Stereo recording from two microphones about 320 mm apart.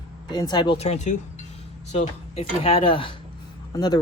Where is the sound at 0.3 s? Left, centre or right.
Centre.